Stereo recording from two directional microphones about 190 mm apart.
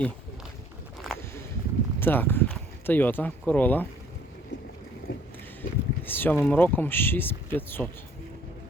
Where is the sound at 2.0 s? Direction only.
10° left (ahead or behind).